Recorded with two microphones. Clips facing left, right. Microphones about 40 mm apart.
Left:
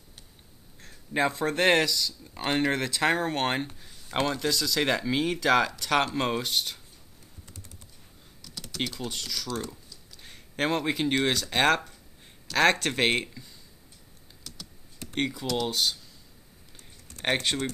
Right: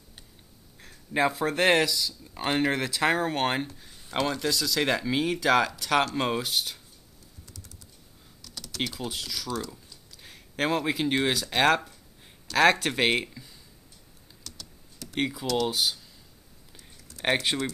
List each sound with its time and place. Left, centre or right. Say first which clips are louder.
0.7 s speech: right 1 dB; centre
7.4 s typing: even; left
8.4 s typing: even; centre
8.7 s speech: right 1 dB; centre
9.7 s a sound: even; centre
11.5 s speech: right 2 dB; centre
14.5 s computer keyboard: even; centre
15.1 s speech: right 1 dB; centre
17.2 s speech: right 1 dB; centre